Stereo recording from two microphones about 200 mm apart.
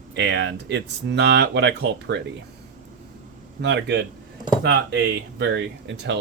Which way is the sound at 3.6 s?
60° right (ahead or behind).